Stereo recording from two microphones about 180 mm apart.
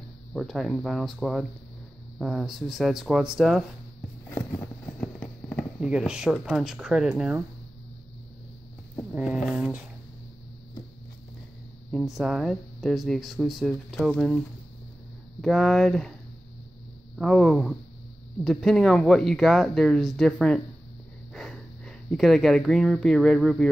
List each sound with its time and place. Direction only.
0.3 s speech: centre (ahead or behind)
4.3 s clip-clop: 15° left (ahead or behind)
5.8 s speech: 5° right (ahead or behind)
9.1 s speech: 5° right (ahead or behind)
11.9 s speech: centre (ahead or behind)
15.4 s speech: centre (ahead or behind)
17.2 s speech: centre (ahead or behind)